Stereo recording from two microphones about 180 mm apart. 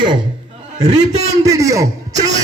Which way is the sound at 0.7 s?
40° right (ahead or behind).